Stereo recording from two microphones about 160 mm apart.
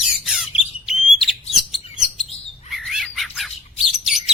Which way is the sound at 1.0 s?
35° left (ahead or behind).